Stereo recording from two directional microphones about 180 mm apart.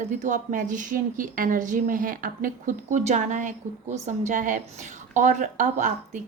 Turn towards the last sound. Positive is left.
turn(degrees=-45)  # may be behind; listen again after turning